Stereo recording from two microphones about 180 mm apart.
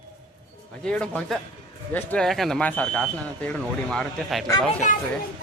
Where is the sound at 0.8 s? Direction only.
5° left (ahead or behind).